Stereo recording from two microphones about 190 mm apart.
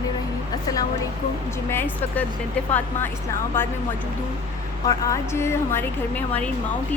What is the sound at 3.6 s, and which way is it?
Speech, 10° left (ahead or behind).